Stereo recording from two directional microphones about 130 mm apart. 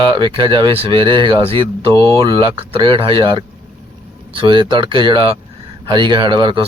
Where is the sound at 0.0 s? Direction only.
40° right (ahead or behind).